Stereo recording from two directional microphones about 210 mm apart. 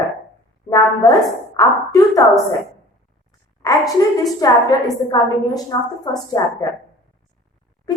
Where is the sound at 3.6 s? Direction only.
15° left (ahead or behind).